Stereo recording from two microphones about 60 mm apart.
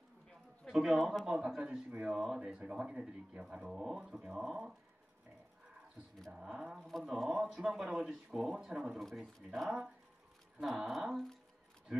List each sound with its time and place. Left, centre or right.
0.7 s speech: centre
1.6 s speech: right
2.0 s speech: centre
6.3 s speech: centre
9.0 s speech: centre
10.6 s speech: centre
11.9 s a sound: centre